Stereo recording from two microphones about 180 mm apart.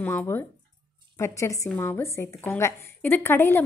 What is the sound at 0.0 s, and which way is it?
A woman's voice, 10° left (ahead or behind).